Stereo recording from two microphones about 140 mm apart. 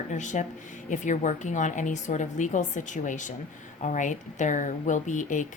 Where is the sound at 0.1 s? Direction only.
60° left (ahead or behind).